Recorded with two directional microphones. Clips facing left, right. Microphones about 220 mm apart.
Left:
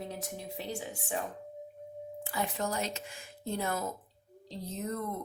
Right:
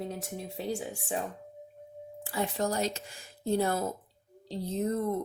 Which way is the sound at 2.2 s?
30° right (ahead or behind).